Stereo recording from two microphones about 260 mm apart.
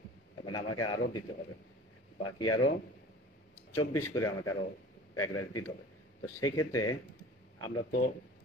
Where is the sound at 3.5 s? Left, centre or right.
Centre.